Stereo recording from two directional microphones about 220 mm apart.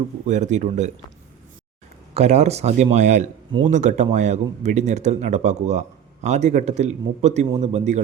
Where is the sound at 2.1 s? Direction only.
30° right (ahead or behind).